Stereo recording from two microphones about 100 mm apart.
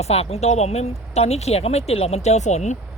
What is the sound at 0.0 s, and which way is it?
Speech, 90° left.